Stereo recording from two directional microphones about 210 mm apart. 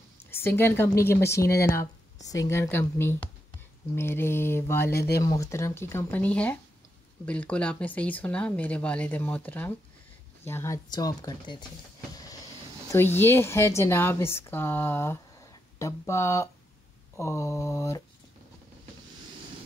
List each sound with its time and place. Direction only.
0.3 s speech: 10° left (ahead or behind)
12.9 s speech: 10° left (ahead or behind)